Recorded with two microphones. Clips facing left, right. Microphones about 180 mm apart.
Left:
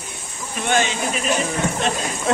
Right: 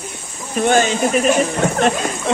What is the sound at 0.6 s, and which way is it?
Speech, 40° right (ahead or behind).